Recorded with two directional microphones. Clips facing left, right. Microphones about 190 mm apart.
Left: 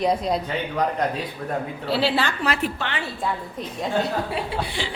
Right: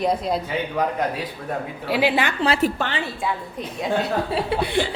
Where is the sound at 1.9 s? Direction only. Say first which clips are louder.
Right 2 dB; 15° right (ahead or behind).